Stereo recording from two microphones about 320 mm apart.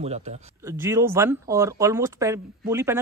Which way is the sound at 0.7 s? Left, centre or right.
Centre.